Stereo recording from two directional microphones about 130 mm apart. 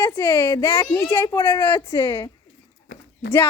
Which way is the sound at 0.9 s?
10° left (ahead or behind).